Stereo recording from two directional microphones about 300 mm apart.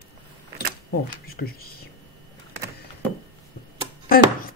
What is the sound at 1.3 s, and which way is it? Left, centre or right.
Speech, left.